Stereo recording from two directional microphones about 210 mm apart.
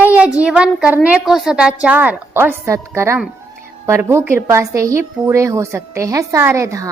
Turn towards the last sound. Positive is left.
turn(degrees=-15)  # may be behind; listen again after turning